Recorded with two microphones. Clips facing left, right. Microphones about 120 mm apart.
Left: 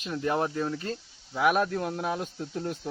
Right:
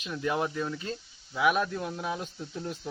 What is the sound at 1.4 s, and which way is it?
Speech, 45° left (ahead or behind).